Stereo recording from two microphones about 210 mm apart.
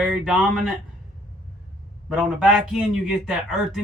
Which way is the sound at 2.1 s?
Centre (ahead or behind).